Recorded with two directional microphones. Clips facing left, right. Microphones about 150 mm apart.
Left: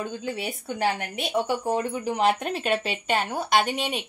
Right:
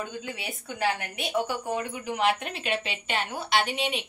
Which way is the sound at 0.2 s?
35° left (ahead or behind).